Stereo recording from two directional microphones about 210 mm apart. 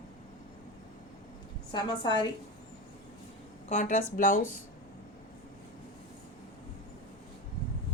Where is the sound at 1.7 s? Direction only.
20° left (ahead or behind).